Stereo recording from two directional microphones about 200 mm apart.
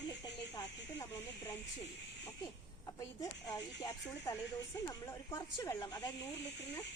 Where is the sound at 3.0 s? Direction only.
20° left (ahead or behind).